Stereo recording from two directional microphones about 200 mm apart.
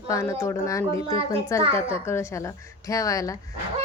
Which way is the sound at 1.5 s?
15° left (ahead or behind).